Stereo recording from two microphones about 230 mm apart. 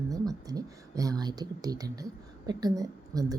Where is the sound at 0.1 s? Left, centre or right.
Centre.